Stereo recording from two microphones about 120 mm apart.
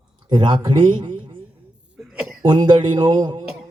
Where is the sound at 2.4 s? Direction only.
40° right (ahead or behind).